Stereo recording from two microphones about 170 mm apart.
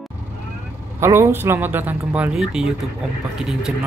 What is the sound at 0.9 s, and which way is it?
Speech, 15° right (ahead or behind).